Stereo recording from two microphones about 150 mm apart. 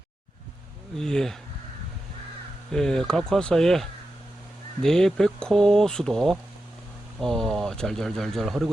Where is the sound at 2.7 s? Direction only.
5° left (ahead or behind).